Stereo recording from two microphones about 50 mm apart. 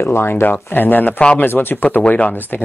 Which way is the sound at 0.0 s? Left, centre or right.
Left.